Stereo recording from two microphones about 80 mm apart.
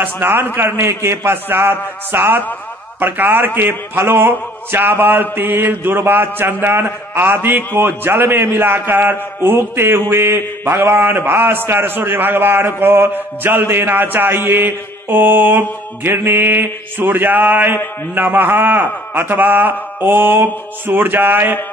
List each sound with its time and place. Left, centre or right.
0.0 s a man's voice: right